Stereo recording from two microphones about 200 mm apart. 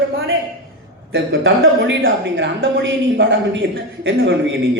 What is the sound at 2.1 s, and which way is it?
A woman's voice, 70° right (ahead or behind).